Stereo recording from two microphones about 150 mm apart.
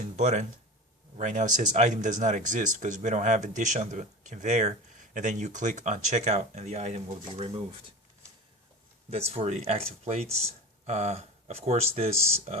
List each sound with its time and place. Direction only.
0.0 s a sound: 50° right (ahead or behind)
1.1 s speech: 55° right (ahead or behind)
9.0 s speech: 45° right (ahead or behind)